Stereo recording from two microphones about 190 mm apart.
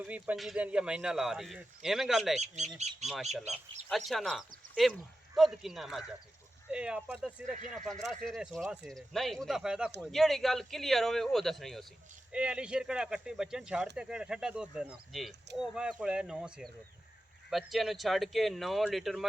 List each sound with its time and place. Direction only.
0.0 s speech: 5° right (ahead or behind)
2.7 s speech: 35° right (ahead or behind)
3.5 s speech: centre (ahead or behind)
7.4 s speech: 40° right (ahead or behind)
8.0 s speech: centre (ahead or behind)